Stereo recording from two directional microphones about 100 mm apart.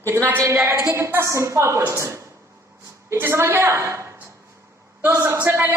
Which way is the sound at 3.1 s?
25° right (ahead or behind).